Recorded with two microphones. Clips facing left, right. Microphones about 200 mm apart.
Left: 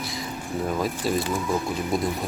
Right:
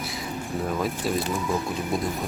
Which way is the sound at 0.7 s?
Centre (ahead or behind).